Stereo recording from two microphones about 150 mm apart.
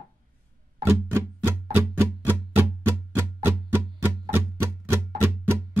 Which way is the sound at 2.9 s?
15° right (ahead or behind).